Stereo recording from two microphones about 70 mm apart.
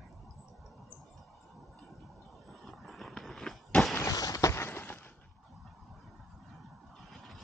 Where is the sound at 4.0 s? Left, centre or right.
Left.